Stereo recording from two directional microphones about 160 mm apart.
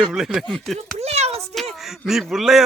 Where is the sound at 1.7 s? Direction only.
Centre (ahead or behind).